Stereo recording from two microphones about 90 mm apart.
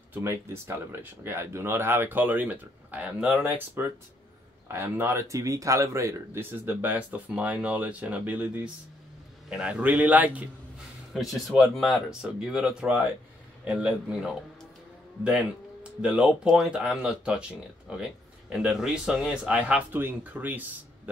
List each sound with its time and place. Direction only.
0.2 s speech: 30° right (ahead or behind)
4.6 s speech: 25° right (ahead or behind)
6.8 s speech: 20° right (ahead or behind)
9.5 s speech: 10° right (ahead or behind)
11.1 s speech: centre (ahead or behind)
16.0 s speech: 5° right (ahead or behind)